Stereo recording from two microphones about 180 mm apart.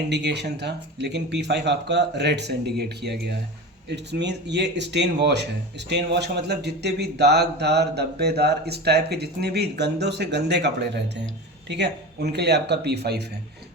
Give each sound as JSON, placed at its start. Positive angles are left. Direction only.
{"t": 0.1, "sound": "a man's voice", "side_deg": -70}